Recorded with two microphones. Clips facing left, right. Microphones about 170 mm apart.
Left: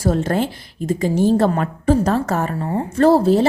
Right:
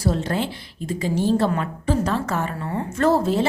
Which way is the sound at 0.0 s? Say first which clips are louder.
Left 5 dB; 50° left (ahead or behind).